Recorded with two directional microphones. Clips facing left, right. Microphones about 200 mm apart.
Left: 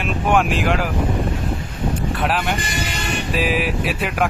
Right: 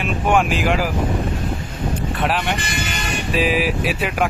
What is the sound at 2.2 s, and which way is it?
Speech, centre (ahead or behind).